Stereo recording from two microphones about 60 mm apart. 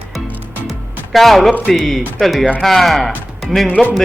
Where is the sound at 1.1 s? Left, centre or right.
Centre.